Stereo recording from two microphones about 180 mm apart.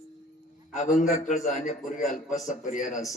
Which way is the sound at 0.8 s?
40° left (ahead or behind).